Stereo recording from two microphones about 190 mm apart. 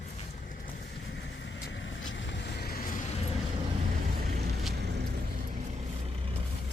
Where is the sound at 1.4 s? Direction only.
70° left (ahead or behind); by 2.9 s 55° left (ahead or behind).